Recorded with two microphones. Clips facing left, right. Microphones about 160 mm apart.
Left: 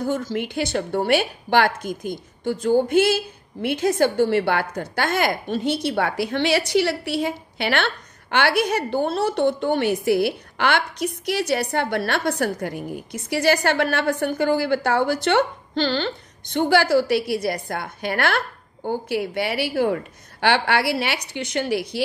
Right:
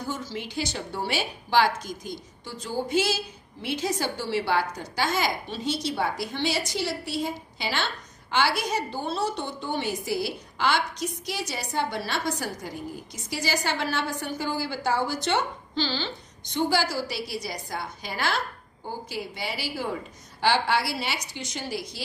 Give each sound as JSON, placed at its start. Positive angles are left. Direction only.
{"t": 0.0, "sound": "a woman's voice", "side_deg": 50}